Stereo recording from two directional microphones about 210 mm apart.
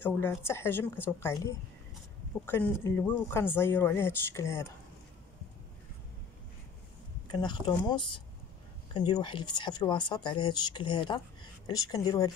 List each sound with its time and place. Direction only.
0.0 s speech: 10° left (ahead or behind)
7.2 s speech: 20° left (ahead or behind)